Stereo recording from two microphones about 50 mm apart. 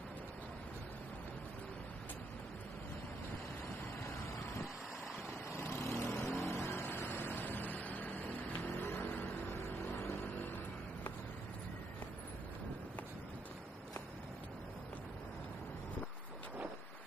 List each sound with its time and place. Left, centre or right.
5.6 s vehicle: left
6.4 s vehicle: left
8.5 s vehicle: left
9.0 s vehicle: left
9.8 s vehicle: left